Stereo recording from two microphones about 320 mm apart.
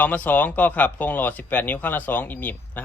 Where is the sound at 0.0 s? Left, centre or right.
Centre.